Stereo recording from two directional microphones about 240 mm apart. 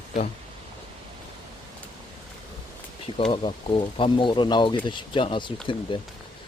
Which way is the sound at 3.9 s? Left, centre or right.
Left.